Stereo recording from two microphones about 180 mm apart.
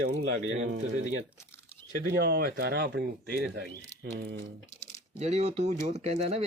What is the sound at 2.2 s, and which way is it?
Speech, 60° right (ahead or behind).